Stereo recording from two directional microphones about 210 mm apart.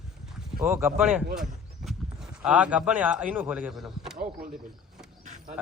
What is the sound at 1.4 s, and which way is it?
Speech, centre (ahead or behind).